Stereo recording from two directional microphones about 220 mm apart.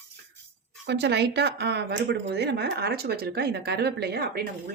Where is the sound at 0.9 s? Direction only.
50° right (ahead or behind).